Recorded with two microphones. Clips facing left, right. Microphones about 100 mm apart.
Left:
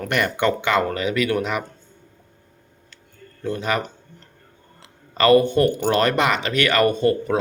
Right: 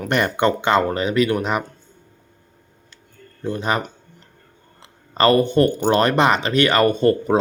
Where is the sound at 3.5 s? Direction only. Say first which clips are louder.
Right 1 dB; 25° right (ahead or behind).